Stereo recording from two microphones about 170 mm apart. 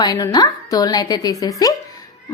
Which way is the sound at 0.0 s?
20° left (ahead or behind).